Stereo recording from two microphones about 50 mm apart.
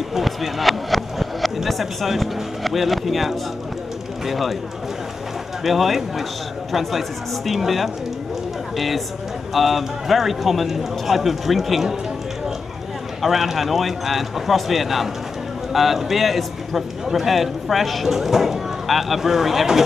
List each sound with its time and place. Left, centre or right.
0.1 s a man's voice: centre
5.6 s a man's voice: centre
13.2 s a man's voice: centre